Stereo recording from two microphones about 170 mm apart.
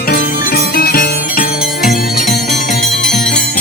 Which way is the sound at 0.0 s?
60° left (ahead or behind).